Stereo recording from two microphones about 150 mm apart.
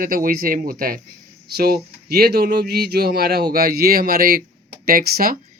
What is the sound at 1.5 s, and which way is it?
Speech, 90° right.